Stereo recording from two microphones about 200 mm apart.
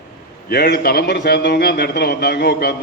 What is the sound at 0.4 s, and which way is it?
A man's voice, 50° left (ahead or behind).